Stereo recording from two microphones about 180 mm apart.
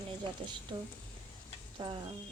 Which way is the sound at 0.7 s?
25° right (ahead or behind).